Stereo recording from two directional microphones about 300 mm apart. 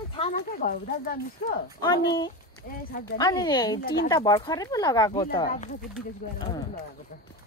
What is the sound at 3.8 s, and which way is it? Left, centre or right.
Speech, left.